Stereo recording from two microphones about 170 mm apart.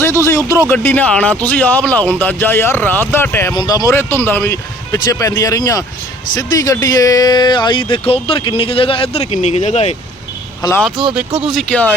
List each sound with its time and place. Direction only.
0.0 s speech: 15° left (ahead or behind)
3.5 s speech: 25° left (ahead or behind); by 9.9 s 40° left (ahead or behind)
10.8 s speech: centre (ahead or behind)